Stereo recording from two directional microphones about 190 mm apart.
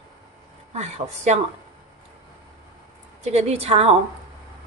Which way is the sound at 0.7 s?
35° right (ahead or behind).